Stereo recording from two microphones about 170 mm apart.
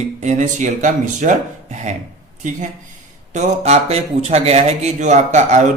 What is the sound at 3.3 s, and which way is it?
Speech, 40° right (ahead or behind).